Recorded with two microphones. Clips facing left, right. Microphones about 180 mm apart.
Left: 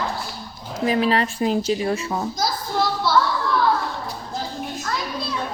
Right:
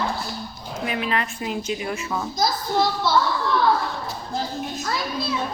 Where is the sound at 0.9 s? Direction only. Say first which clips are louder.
Left 6 dB; 35° left (ahead or behind).